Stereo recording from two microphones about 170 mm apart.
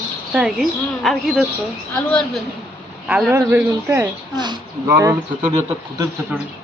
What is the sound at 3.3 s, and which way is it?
Speech, 10° right (ahead or behind).